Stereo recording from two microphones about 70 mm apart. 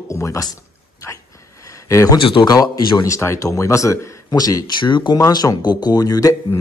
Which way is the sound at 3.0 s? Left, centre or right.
Left.